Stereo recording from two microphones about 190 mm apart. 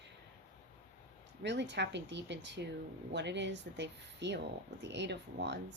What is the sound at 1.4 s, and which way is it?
A woman's voice, 65° right (ahead or behind).